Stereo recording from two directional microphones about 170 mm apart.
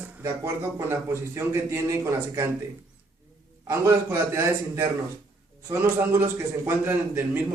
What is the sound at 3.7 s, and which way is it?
Speech, 15° right (ahead or behind).